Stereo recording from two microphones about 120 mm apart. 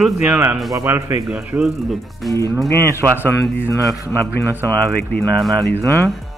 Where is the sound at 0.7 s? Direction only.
25° right (ahead or behind).